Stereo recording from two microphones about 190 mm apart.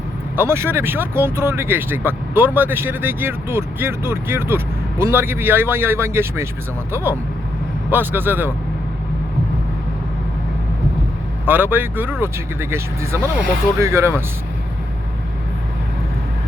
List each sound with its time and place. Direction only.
0.3 s speech: 10° right (ahead or behind)
11.4 s speech: 10° right (ahead or behind)